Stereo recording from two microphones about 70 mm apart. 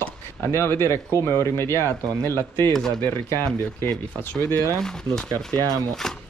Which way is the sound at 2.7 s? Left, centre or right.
Centre.